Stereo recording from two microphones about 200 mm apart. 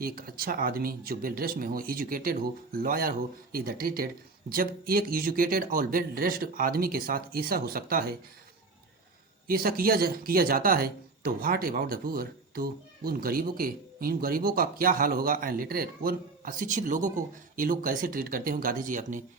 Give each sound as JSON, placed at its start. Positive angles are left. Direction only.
{"t": 0.0, "sound": "speech", "side_deg": -45}
{"t": 9.5, "sound": "speech", "side_deg": -45}